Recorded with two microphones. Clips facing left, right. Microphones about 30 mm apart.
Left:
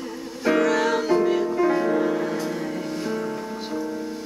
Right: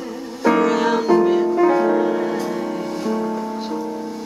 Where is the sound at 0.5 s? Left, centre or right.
Centre.